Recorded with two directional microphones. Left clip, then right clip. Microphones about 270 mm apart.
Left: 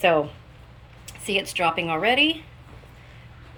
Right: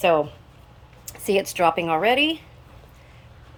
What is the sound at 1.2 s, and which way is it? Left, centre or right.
Speech, centre.